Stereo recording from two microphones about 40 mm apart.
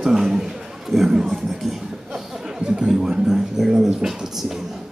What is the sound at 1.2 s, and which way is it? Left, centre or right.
Music, centre.